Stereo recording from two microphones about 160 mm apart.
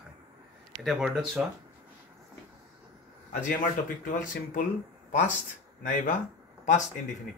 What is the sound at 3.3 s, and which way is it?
A man's voice, 55° left (ahead or behind).